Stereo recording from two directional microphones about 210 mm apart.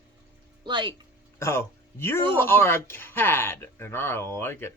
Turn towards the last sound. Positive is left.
turn(degrees=10)  # may be behind; listen again after turning